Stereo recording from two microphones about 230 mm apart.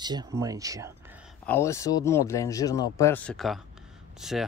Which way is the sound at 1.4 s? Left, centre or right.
Centre.